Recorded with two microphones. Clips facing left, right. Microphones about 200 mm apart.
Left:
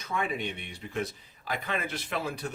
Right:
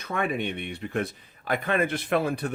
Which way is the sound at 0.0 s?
60° right (ahead or behind).